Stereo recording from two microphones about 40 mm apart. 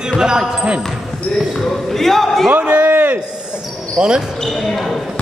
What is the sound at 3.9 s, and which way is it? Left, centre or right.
Speech, right.